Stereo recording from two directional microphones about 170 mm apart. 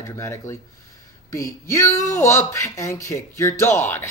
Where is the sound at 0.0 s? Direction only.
15° left (ahead or behind).